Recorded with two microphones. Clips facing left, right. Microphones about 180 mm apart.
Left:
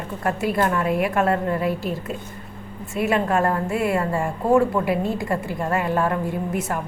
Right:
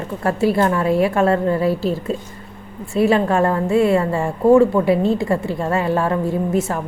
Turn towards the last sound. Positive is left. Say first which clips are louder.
# right 6 dB
turn(degrees=-30)  # may be behind; listen again after turning